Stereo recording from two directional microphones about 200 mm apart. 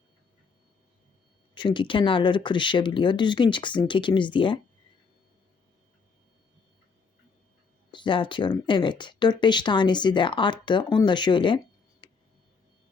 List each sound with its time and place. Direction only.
1.5 s speech: 25° left (ahead or behind)
7.9 s speech: 25° left (ahead or behind)